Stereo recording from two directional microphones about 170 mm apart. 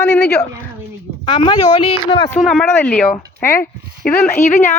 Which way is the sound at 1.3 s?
30° left (ahead or behind).